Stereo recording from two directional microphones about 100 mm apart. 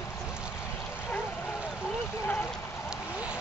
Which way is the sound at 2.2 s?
15° left (ahead or behind).